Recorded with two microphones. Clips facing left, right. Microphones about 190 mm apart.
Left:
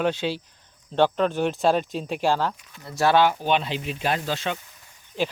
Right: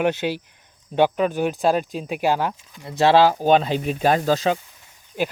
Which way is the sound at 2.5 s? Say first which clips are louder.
Right 5 dB; 20° right (ahead or behind).